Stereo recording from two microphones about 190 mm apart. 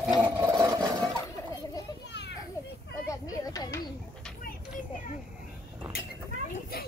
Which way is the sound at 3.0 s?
20° left (ahead or behind).